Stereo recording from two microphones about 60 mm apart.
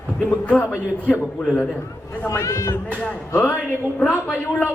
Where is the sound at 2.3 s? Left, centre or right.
Left.